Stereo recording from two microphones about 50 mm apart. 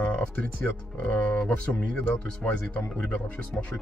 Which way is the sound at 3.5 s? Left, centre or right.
Centre.